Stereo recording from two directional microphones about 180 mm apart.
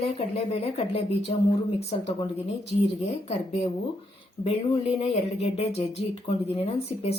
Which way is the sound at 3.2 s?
35° left (ahead or behind).